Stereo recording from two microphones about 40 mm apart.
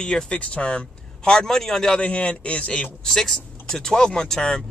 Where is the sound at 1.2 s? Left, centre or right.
Centre.